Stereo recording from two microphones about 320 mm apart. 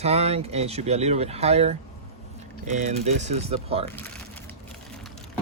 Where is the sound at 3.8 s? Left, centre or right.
Centre.